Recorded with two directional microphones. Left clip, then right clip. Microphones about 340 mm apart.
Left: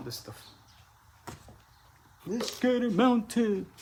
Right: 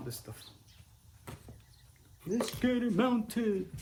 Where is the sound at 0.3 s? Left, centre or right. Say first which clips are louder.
Left 3 dB; centre.